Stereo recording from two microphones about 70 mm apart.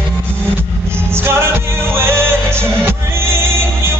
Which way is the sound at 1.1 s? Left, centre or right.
Right.